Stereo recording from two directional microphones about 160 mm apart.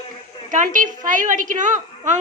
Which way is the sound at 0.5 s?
55° right (ahead or behind).